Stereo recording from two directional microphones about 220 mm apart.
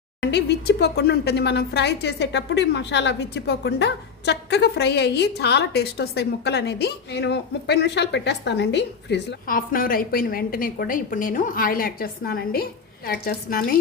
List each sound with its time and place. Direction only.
0.2 s speech: 50° left (ahead or behind)